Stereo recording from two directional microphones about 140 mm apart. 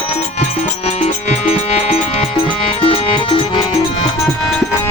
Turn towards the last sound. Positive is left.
turn(degrees=40)  # may be behind; listen again after turning